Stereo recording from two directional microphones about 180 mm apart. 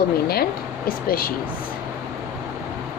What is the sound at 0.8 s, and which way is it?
Speech, 55° left (ahead or behind).